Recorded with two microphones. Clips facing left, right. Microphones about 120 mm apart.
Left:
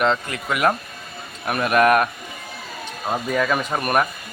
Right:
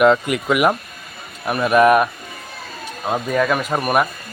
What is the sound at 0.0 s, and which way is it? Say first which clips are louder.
Speech: right 7 dB; 15° right (ahead or behind).